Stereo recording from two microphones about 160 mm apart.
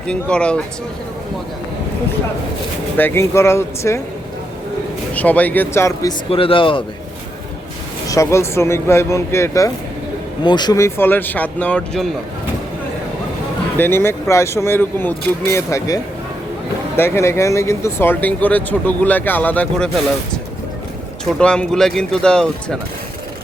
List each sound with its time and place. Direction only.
0.1 s speech: 5° left (ahead or behind)
3.0 s speech: 15° left (ahead or behind)
5.1 s speech: 10° left (ahead or behind)
6.3 s speech: 35° left (ahead or behind)
8.0 s speech: 20° left (ahead or behind)
13.7 s speech: 15° left (ahead or behind)
17.0 s speech: 15° left (ahead or behind)
21.3 s speech: 5° left (ahead or behind)